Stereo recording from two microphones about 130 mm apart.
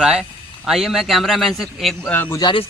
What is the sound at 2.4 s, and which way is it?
Speech, 35° left (ahead or behind).